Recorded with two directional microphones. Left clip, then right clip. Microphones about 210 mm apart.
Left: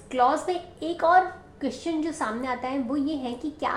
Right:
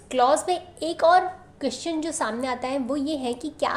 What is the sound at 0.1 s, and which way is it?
A woman's voice, 40° right (ahead or behind).